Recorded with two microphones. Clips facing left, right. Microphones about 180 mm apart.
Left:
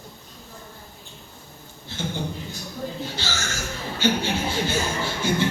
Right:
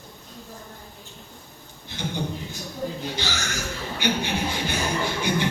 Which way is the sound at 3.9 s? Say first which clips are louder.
Left 3 dB; 15° right (ahead or behind).